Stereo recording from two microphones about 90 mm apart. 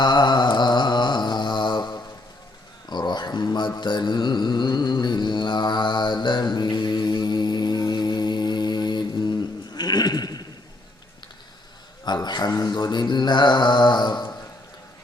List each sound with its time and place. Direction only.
0.0 s mantra: 55° left (ahead or behind)
2.9 s a sound: 55° left (ahead or behind)
3.8 s mantra: 60° left (ahead or behind)
12.0 s mantra: 55° left (ahead or behind)